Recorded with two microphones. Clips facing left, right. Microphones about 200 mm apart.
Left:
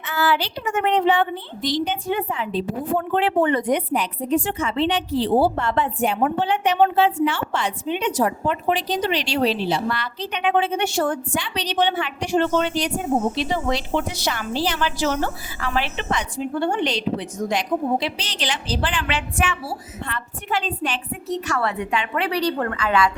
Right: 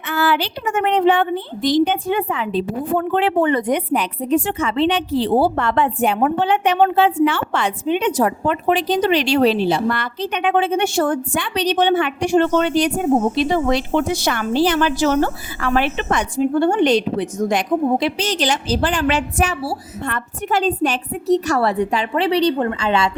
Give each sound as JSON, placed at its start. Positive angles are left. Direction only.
{"t": 0.1, "sound": "a woman's voice", "side_deg": -55}
{"t": 3.1, "sound": "speech", "side_deg": -80}